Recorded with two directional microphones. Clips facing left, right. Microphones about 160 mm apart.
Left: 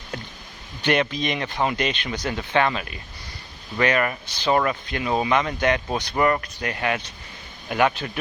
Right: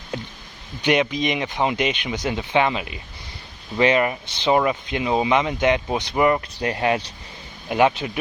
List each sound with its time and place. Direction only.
0.8 s speech: 15° right (ahead or behind)
6.4 s speech: 25° right (ahead or behind)